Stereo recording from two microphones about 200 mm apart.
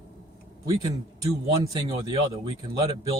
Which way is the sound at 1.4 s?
20° right (ahead or behind).